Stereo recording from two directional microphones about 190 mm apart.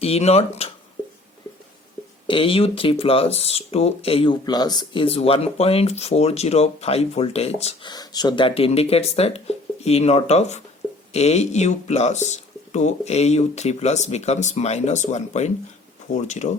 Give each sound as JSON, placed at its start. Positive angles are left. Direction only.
{"t": 0.0, "sound": "speech", "side_deg": 30}
{"t": 2.2, "sound": "speech", "side_deg": 25}